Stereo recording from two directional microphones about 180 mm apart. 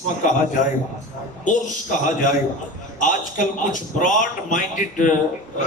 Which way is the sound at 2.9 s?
45° left (ahead or behind).